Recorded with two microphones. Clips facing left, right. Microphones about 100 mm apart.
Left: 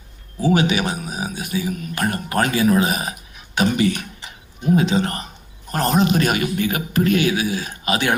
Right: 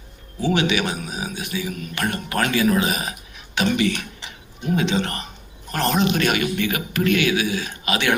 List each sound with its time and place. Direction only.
0.4 s a man's voice: 40° left (ahead or behind)